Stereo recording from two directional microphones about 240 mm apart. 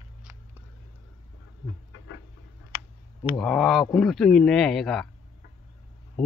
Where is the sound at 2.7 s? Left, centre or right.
Left.